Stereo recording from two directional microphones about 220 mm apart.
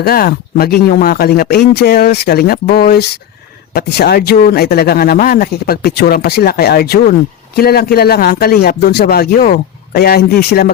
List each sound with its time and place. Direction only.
0.0 s speech: 45° left (ahead or behind)